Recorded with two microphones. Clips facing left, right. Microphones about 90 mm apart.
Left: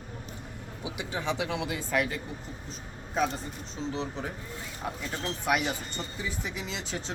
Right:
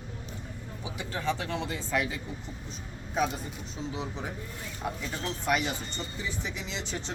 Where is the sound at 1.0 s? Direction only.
15° left (ahead or behind); by 3.4 s 5° right (ahead or behind).